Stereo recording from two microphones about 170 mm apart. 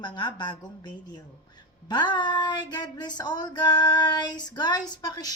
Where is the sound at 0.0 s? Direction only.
25° left (ahead or behind).